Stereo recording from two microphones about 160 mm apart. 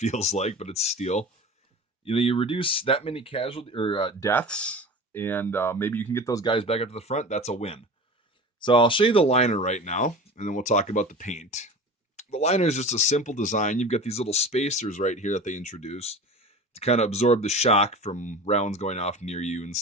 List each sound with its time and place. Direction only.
0.0 s speech: 45° left (ahead or behind)
4.2 s speech: 10° left (ahead or behind); by 19.8 s 45° left (ahead or behind)